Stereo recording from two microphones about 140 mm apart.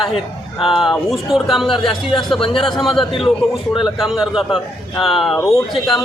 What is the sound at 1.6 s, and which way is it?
Speech, 35° left (ahead or behind).